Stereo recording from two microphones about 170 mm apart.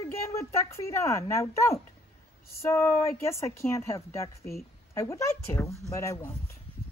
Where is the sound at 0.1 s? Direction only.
15° left (ahead or behind).